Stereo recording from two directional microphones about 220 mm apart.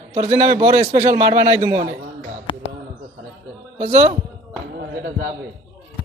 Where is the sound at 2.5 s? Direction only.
25° left (ahead or behind).